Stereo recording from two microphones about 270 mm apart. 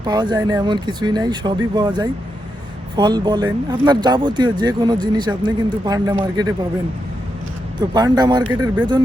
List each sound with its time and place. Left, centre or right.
0.0 s speech: centre
7.8 s speech: centre